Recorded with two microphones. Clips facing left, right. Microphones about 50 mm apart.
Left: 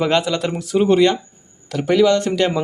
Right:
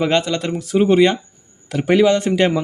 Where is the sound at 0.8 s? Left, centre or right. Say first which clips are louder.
Right 1 dB; centre.